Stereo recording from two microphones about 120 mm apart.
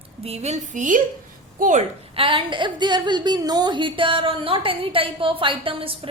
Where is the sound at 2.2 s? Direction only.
45° right (ahead or behind).